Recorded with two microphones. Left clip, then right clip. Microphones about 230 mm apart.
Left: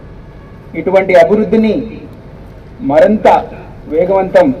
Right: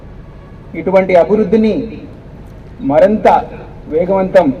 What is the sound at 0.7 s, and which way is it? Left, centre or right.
A man's voice, left.